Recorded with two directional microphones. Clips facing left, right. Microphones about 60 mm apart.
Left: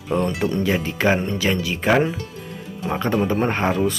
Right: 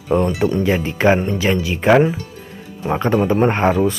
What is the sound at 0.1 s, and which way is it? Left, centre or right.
A man's voice, right.